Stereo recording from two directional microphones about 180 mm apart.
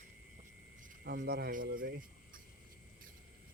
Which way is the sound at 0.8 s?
55° right (ahead or behind).